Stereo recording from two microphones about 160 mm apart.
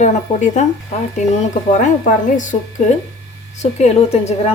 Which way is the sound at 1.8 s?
50° left (ahead or behind).